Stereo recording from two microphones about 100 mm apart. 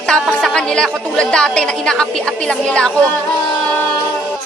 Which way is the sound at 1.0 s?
10° left (ahead or behind).